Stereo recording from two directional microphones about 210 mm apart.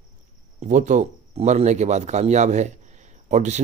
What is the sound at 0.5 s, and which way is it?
Speech, 35° right (ahead or behind).